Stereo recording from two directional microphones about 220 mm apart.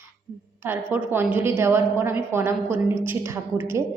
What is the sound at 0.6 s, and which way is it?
Speech, 10° right (ahead or behind).